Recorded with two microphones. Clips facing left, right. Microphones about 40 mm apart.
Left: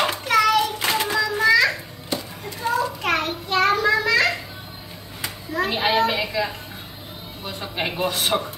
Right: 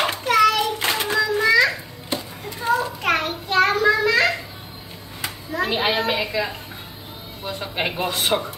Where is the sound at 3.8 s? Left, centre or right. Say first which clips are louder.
Right 1 dB; centre.